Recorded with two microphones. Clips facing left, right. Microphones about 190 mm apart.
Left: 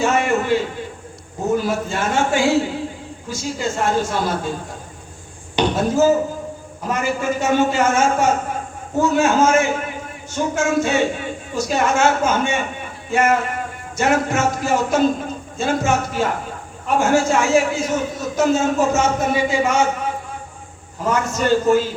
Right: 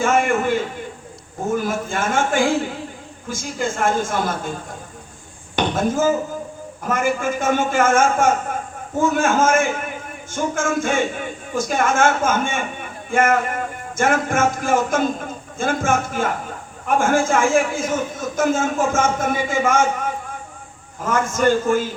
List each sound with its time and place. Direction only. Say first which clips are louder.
0.0 s a sound: even; 50° right (ahead or behind)
1.5 s a man's voice: left 1 dB; 50° right (ahead or behind)
5.5 s a man's voice: left 3 dB; 50° right (ahead or behind)
21.1 s a man's voice: even; 50° right (ahead or behind)